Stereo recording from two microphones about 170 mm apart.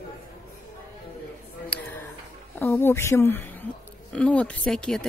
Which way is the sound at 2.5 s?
15° left (ahead or behind).